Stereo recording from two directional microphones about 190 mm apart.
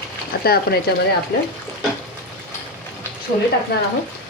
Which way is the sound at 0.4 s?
55° left (ahead or behind).